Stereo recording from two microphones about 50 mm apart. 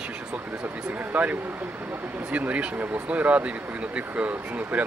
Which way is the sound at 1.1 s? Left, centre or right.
Right.